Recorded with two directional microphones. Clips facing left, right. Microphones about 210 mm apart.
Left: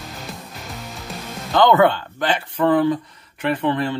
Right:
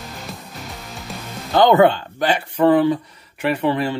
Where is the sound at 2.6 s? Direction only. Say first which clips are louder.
Right 2 dB; 20° right (ahead or behind).